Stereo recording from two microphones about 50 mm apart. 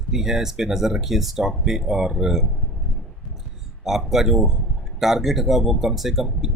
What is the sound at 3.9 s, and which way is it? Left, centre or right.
Speech, centre.